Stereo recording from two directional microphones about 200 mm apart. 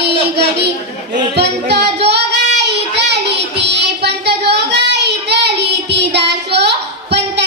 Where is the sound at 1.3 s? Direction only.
55° right (ahead or behind).